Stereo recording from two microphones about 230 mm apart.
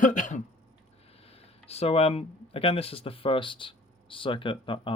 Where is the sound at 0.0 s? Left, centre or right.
Left.